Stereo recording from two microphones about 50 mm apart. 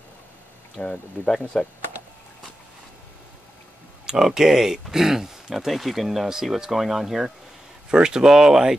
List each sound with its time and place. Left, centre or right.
0.8 s speech: left
1.2 s speech: centre
4.0 s speech: centre